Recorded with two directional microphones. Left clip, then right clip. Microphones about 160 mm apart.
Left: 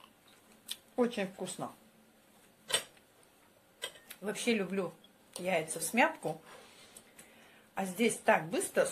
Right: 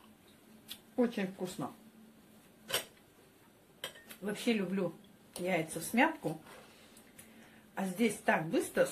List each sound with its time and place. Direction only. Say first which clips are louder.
0.7 s speech: left 1 dB; 65° left (ahead or behind)
4.2 s a woman's voice: left 2 dB; 60° left (ahead or behind)
7.7 s a woman's voice: left 2 dB; 60° left (ahead or behind)